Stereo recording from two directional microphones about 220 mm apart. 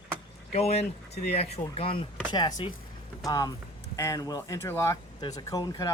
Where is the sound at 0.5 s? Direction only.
30° left (ahead or behind).